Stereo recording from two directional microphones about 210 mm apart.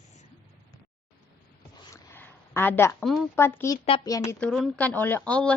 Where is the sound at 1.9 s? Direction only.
10° left (ahead or behind).